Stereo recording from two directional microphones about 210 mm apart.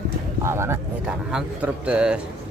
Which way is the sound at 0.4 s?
10° right (ahead or behind).